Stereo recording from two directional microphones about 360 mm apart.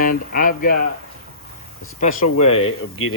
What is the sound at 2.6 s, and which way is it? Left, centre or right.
Speech, left.